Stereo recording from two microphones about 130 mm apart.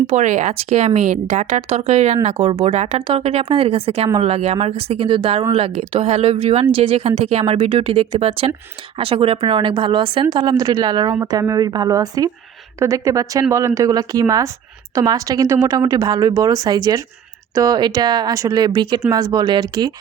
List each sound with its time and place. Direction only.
0.1 s speech: 65° right (ahead or behind); by 19.9 s 30° right (ahead or behind)